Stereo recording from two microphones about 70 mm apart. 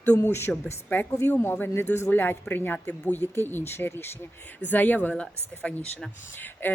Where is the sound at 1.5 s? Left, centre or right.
Left.